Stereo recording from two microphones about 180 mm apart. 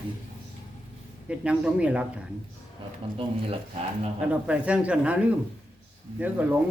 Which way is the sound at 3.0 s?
30° right (ahead or behind).